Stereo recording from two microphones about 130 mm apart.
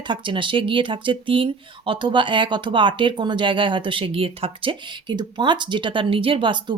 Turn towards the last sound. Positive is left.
turn(degrees=-40)  # may be behind; listen again after turning